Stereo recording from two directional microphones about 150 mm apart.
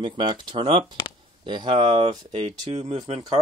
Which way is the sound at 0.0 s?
35° right (ahead or behind).